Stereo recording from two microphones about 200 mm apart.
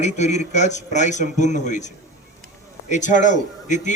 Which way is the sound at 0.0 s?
35° left (ahead or behind).